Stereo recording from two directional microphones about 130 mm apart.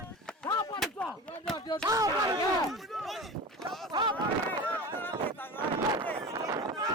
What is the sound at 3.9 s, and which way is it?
Speech, 35° right (ahead or behind).